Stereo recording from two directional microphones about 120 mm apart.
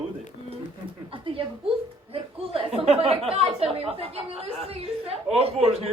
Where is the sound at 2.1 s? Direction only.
50° right (ahead or behind).